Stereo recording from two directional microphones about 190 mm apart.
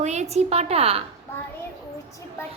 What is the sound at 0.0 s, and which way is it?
A child's voice, 35° right (ahead or behind).